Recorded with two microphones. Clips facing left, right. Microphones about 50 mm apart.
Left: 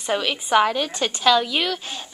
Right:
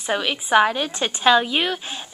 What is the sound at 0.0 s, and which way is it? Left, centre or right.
A woman's voice, centre.